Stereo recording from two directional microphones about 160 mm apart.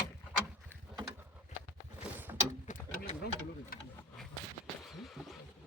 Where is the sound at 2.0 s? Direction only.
10° right (ahead or behind).